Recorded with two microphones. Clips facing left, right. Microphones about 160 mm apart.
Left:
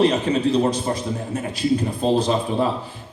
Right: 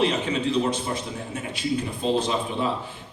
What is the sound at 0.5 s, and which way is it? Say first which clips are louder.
A man's voice: left 4 dB; 40° left (ahead or behind).